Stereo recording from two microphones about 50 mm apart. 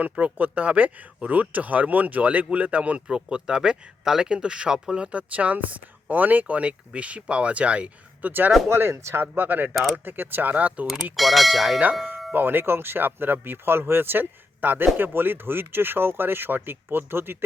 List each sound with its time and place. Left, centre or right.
0.0 s speech: right
8.3 s speech: right
11.2 s speech: centre
12.3 s speech: right